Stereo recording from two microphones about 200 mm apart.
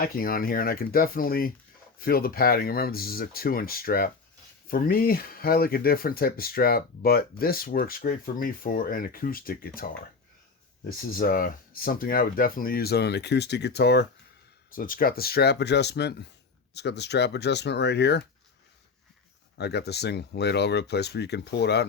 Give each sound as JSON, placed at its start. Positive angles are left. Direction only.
{"t": 0.0, "sound": "speech", "side_deg": 45}
{"t": 11.2, "sound": "speech", "side_deg": 45}
{"t": 19.5, "sound": "speech", "side_deg": 55}